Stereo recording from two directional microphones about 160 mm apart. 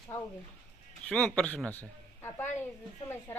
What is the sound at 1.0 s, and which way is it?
Speech, 5° left (ahead or behind).